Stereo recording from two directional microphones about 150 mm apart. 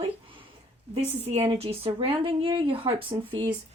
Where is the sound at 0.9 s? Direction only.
45° right (ahead or behind).